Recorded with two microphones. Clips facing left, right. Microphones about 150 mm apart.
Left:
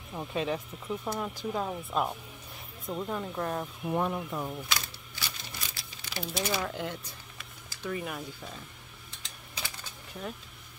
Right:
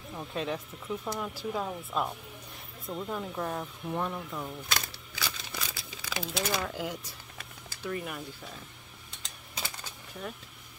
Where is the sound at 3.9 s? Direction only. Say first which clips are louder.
Left 4 dB; 15° left (ahead or behind).